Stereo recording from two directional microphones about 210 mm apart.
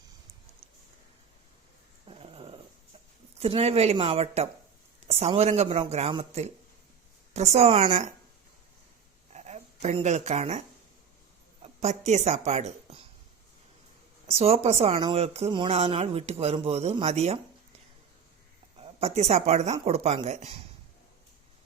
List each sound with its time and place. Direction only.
2.0 s dog: 25° right (ahead or behind)
3.4 s speech: 30° right (ahead or behind)
9.3 s a sound: 30° right (ahead or behind)
11.6 s a woman's voice: 30° right (ahead or behind)
14.3 s speech: 30° right (ahead or behind)
18.8 s speech: 30° right (ahead or behind)